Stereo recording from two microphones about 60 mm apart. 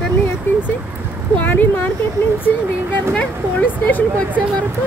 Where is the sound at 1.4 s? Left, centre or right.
Left.